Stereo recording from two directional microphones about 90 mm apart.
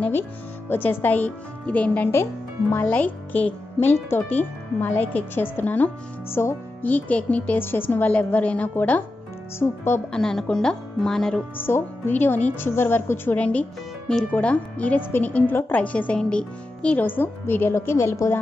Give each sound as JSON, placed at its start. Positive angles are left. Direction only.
{"t": 0.7, "sound": "a woman's voice", "side_deg": 20}
{"t": 10.1, "sound": "a woman's voice", "side_deg": 5}
{"t": 11.5, "sound": "a woman's voice", "side_deg": 25}